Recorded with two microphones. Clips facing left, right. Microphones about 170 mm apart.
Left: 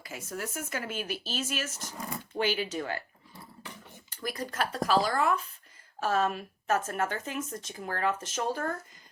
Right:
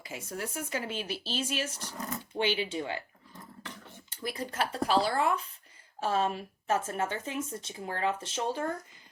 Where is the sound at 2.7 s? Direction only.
20° right (ahead or behind).